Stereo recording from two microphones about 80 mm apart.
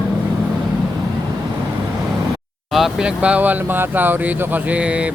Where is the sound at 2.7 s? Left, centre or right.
Centre.